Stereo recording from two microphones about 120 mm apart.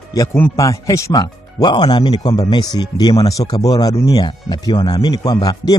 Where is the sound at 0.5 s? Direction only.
30° left (ahead or behind).